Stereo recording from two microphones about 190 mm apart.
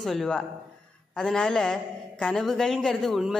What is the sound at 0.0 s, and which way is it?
A woman's voice, centre (ahead or behind).